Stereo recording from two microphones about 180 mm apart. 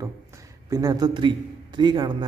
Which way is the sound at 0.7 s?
20° right (ahead or behind).